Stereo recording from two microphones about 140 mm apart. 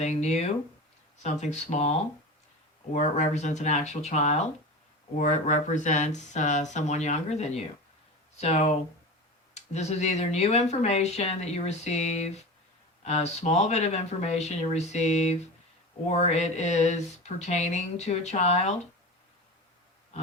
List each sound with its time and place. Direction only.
0.0 s speech: 55° left (ahead or behind)